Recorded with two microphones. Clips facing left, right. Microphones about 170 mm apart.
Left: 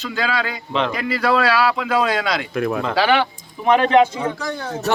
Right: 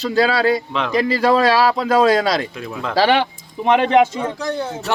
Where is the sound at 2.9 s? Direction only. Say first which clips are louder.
Right 3 dB; 35° right (ahead or behind).